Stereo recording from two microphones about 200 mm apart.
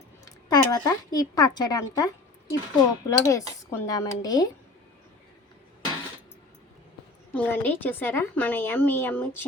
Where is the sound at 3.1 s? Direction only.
15° left (ahead or behind).